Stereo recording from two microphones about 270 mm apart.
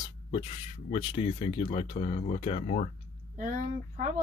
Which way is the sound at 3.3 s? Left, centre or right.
Right.